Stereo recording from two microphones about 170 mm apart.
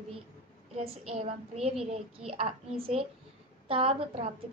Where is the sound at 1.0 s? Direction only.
35° right (ahead or behind).